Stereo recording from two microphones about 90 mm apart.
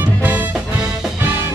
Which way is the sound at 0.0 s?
20° right (ahead or behind).